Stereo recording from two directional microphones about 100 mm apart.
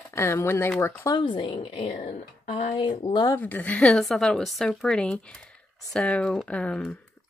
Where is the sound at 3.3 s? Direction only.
20° left (ahead or behind).